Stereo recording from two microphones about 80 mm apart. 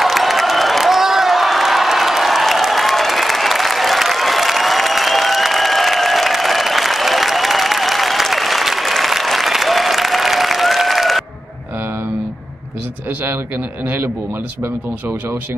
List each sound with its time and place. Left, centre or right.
0.0 s crowd: centre
13.8 s a man's voice: right